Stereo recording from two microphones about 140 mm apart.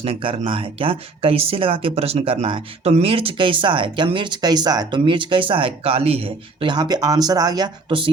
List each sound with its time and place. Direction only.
0.0 s speech: 40° right (ahead or behind)